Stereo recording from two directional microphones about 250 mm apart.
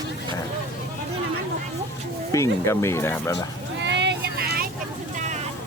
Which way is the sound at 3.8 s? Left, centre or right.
Right.